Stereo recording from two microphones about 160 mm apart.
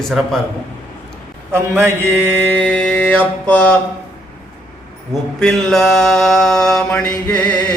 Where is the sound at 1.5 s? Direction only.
15° right (ahead or behind).